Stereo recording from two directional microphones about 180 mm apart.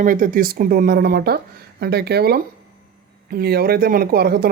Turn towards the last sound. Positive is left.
turn(degrees=-60)  # may be behind; listen again after turning